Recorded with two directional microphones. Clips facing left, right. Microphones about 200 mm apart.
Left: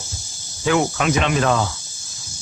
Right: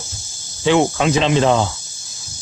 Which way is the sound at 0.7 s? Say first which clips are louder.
Right 4 dB; 25° right (ahead or behind).